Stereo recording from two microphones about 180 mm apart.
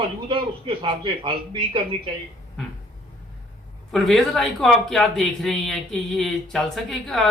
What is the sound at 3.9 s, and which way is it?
Speech, centre (ahead or behind).